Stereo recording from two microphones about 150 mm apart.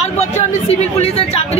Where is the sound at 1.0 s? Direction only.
45° left (ahead or behind).